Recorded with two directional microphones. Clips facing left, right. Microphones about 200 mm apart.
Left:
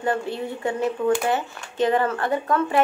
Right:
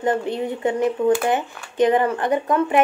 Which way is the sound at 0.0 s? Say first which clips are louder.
Right 4 dB; 20° right (ahead or behind).